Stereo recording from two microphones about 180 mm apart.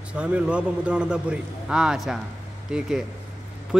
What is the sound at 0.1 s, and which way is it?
A man's voice, 5° right (ahead or behind).